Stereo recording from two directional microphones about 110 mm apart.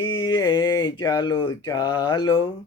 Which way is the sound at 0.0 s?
45° left (ahead or behind).